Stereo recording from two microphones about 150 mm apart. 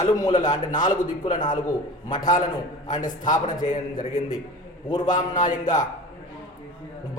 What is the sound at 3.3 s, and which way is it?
Speech, 60° left (ahead or behind).